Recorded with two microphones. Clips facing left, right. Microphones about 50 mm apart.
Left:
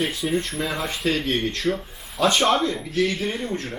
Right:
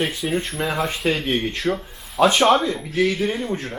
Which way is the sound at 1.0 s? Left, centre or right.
Centre.